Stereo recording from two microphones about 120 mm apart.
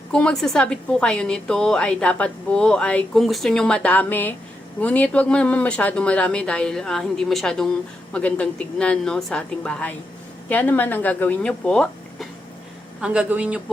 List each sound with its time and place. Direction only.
0.1 s a woman's voice: 5° left (ahead or behind)
13.0 s speech: 10° right (ahead or behind)